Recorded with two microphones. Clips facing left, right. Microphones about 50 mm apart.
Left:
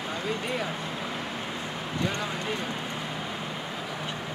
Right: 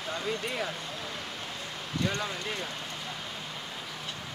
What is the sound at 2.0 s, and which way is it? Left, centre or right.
Speech, centre.